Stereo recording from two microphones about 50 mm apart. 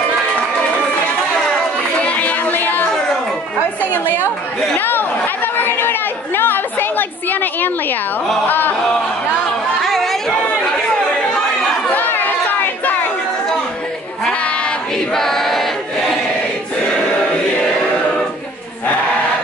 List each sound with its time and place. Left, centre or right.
2.0 s music: left
4.7 s speech: left
8.5 s music: left
9.8 s chatter: centre
11.9 s chatter: left
15.1 s choir: centre